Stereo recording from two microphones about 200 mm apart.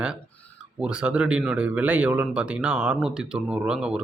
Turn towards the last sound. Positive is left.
turn(degrees=-5)  # may be behind; listen again after turning